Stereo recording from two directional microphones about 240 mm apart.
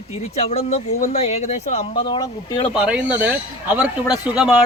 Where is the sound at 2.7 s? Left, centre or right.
Centre.